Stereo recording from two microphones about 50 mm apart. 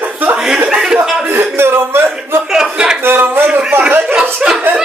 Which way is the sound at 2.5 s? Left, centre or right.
Centre.